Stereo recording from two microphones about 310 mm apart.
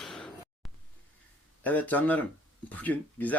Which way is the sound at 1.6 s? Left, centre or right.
Centre.